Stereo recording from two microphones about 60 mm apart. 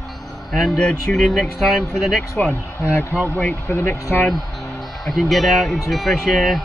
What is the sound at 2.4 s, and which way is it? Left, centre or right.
Speech, centre.